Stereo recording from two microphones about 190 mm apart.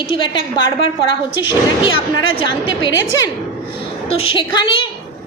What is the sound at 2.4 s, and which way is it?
Speech, 25° left (ahead or behind).